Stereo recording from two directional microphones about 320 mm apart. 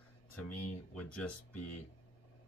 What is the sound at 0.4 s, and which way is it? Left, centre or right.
Speech, left.